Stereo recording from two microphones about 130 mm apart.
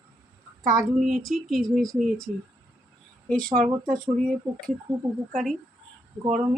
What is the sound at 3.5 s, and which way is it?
Speech, 90° right.